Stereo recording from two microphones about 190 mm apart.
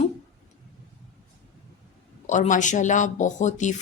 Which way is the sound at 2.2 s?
40° left (ahead or behind).